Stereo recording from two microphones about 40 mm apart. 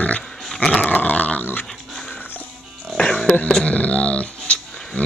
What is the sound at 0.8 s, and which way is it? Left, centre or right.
Dog, left.